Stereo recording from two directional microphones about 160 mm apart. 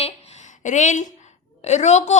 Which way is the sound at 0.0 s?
45° left (ahead or behind).